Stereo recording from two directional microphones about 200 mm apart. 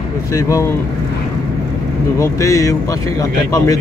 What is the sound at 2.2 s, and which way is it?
Speech, 15° left (ahead or behind).